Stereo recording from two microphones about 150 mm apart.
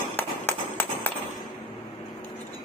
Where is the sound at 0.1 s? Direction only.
15° left (ahead or behind).